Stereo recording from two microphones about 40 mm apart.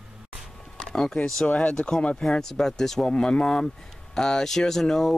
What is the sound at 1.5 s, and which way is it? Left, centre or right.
Speech, left.